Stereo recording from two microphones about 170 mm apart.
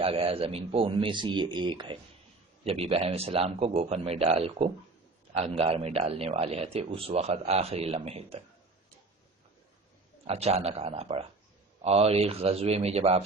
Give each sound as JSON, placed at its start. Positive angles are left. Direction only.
{"t": 0.0, "sound": "a man's voice", "side_deg": -35}
{"t": 10.2, "sound": "a man's voice", "side_deg": -35}